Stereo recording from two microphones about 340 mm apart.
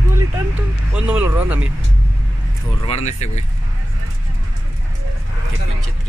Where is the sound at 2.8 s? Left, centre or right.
Centre.